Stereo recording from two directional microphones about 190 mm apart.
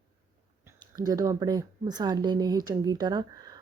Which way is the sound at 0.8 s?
20° right (ahead or behind).